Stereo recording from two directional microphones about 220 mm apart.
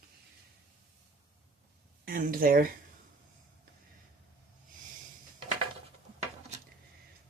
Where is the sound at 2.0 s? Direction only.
40° right (ahead or behind).